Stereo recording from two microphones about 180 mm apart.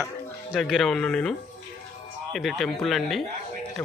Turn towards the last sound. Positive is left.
turn(degrees=0)  # may be behind; listen again after turning